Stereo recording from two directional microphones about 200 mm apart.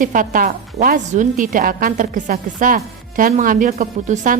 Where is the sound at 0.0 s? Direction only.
40° right (ahead or behind).